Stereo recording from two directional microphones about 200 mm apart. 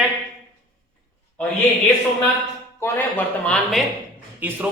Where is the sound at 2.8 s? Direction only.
5° left (ahead or behind).